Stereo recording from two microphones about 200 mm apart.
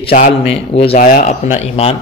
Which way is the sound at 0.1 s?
35° left (ahead or behind).